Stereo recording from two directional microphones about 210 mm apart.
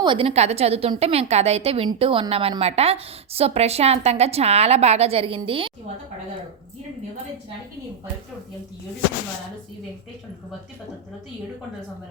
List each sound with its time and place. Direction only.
0.0 s a woman's voice: 25° right (ahead or behind)